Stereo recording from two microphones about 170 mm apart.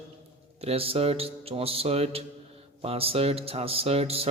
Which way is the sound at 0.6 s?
35° right (ahead or behind).